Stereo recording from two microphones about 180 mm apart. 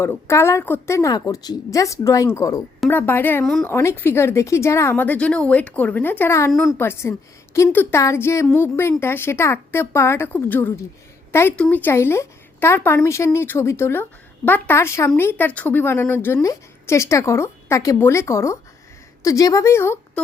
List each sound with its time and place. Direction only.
0.0 s speech: 15° left (ahead or behind)
6.5 s a woman's voice: centre (ahead or behind)
6.7 s speech: 15° left (ahead or behind)